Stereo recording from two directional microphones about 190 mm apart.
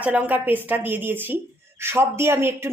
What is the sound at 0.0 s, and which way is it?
Speech, 10° right (ahead or behind).